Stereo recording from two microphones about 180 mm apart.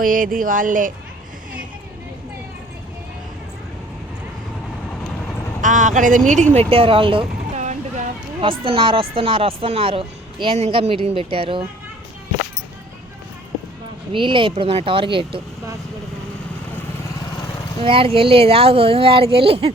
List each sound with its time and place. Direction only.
0.0 s speech: 50° right (ahead or behind)
5.6 s speech: 45° right (ahead or behind)
7.6 s speech: 40° right (ahead or behind)
14.1 s speech: 30° right (ahead or behind)
17.8 s speech: 30° right (ahead or behind)